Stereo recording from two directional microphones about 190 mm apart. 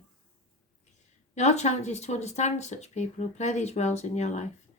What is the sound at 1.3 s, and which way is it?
Speech, 35° left (ahead or behind).